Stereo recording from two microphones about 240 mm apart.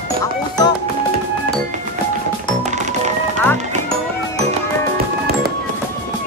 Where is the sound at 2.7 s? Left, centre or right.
Right.